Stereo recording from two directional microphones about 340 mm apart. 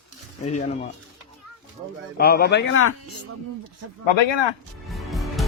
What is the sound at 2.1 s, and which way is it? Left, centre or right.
Speech, left.